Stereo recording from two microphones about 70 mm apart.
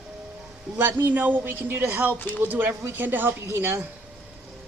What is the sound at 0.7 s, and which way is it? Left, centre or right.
A woman's voice, right.